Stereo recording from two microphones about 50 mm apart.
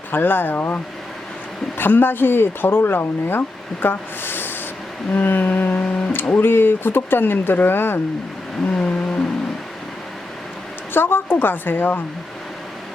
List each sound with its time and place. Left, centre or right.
0.1 s speech: left
1.8 s speech: left
5.5 s a sound: left
6.4 s speech: left
8.7 s vehicle: centre
10.9 s speech: left